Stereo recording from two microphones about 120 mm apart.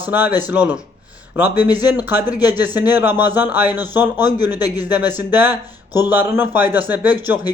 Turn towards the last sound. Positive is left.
turn(degrees=-15)  # may be behind; listen again after turning